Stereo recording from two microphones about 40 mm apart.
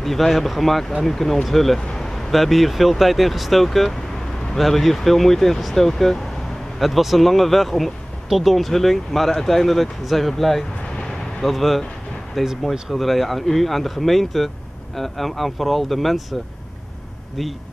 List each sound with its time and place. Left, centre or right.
0.0 s speech: centre
12.4 s speech: centre
12.9 s speech: centre